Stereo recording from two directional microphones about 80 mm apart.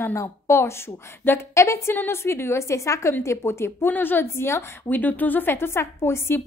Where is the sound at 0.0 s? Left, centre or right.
Left.